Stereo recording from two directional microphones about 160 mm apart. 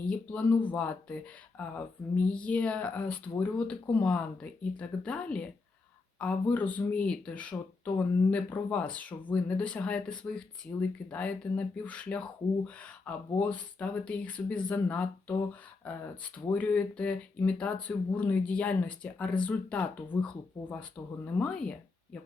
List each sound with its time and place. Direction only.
0.1 s speech: 10° left (ahead or behind)
2.2 s speech: 10° left (ahead or behind)